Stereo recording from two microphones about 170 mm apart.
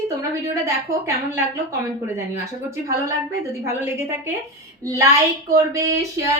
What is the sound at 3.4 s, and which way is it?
Speech, 15° right (ahead or behind).